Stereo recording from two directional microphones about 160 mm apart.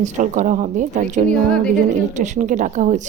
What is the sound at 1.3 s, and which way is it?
Speech, 5° left (ahead or behind).